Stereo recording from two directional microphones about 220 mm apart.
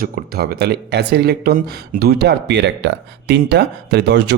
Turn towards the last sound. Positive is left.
turn(degrees=-50)  # may be behind; listen again after turning